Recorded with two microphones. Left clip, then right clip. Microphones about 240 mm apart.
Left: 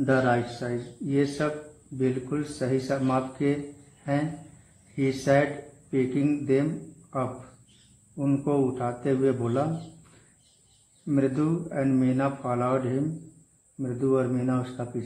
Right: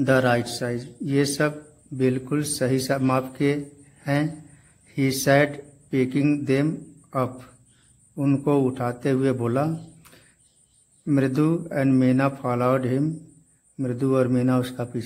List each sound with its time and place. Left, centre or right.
0.0 s a man's voice: right
11.1 s a man's voice: right